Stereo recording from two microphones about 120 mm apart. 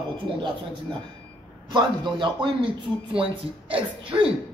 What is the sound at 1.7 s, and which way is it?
Speech, 40° right (ahead or behind).